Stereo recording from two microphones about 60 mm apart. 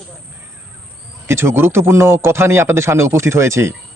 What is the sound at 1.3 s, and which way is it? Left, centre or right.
Speech, right.